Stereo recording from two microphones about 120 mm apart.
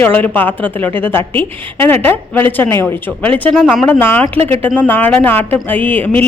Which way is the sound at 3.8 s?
15° left (ahead or behind).